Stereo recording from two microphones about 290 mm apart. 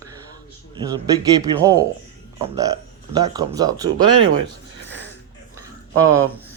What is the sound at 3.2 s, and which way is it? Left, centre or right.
Speech, centre.